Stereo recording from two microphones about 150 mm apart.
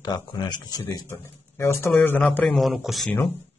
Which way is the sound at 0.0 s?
30° left (ahead or behind).